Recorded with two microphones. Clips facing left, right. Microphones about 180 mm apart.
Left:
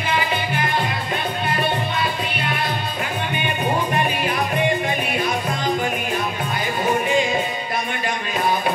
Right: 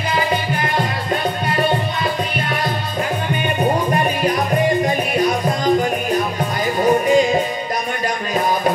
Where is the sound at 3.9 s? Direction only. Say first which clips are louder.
Right 4 dB; 40° right (ahead or behind).